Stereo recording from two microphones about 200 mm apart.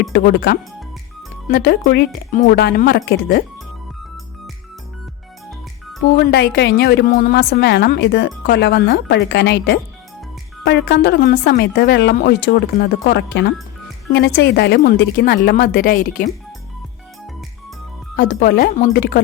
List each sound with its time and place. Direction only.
0.1 s speech: 50° left (ahead or behind)
6.1 s a woman's voice: 55° left (ahead or behind)
18.2 s speech: 50° left (ahead or behind)